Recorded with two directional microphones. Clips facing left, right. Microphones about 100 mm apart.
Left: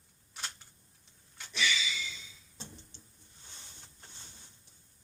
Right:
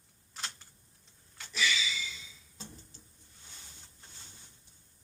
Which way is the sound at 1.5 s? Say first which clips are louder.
Right 1 dB; centre (ahead or behind).